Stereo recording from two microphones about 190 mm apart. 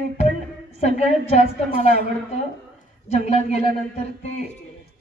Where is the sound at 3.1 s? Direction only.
35° left (ahead or behind).